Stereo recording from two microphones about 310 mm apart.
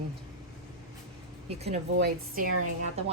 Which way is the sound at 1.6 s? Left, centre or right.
Right.